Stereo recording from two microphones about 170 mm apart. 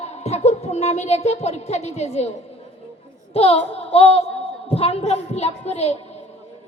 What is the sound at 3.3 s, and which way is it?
A woman's voice, 35° left (ahead or behind).